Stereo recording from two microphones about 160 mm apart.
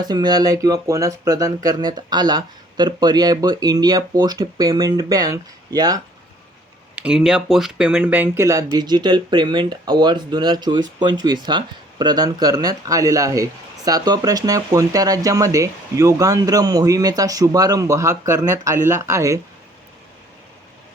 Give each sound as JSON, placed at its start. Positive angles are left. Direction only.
{"t": 0.0, "sound": "speech", "side_deg": -25}
{"t": 6.9, "sound": "speech", "side_deg": -5}